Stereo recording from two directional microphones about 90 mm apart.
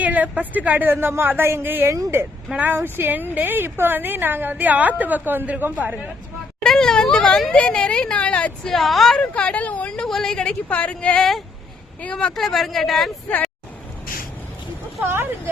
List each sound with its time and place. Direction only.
0.0 s a woman's voice: 20° right (ahead or behind)
2.5 s a woman's voice: 20° right (ahead or behind)
6.6 s speech: 5° left (ahead or behind)
8.7 s speech: centre (ahead or behind)
9.1 s speech: 10° left (ahead or behind)
13.2 s speech: 15° left (ahead or behind)
15.0 s a woman's voice: 25° right (ahead or behind)